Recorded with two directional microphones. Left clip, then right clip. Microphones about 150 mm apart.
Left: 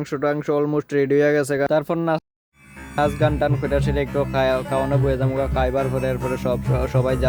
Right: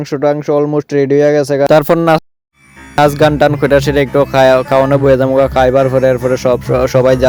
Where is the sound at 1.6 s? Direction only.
65° right (ahead or behind).